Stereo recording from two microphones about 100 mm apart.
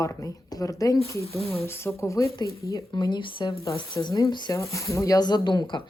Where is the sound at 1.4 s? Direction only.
85° left.